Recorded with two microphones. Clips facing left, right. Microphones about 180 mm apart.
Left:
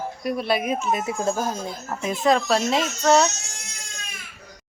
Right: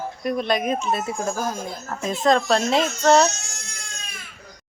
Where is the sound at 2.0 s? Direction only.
10° left (ahead or behind).